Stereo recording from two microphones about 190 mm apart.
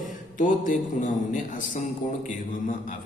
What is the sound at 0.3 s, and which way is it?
A man's voice, 40° left (ahead or behind).